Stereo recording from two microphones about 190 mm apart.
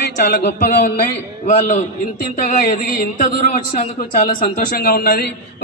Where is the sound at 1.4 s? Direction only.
45° left (ahead or behind).